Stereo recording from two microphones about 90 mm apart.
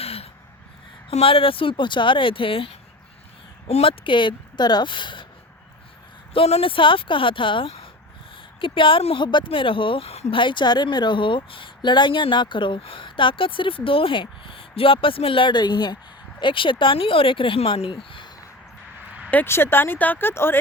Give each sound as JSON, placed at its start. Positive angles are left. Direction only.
{"t": 0.0, "sound": "gasp", "side_deg": 90}
{"t": 1.2, "sound": "speech", "side_deg": 90}
{"t": 3.8, "sound": "speech", "side_deg": 65}
{"t": 6.3, "sound": "speech", "side_deg": 90}
{"t": 16.4, "sound": "speech", "side_deg": 65}
{"t": 19.3, "sound": "speech", "side_deg": 25}